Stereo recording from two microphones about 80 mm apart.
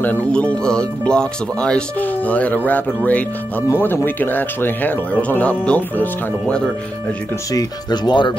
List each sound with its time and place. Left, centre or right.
0.0 s speech: centre
3.6 s speech: left; by 6.7 s centre
7.5 s speech: left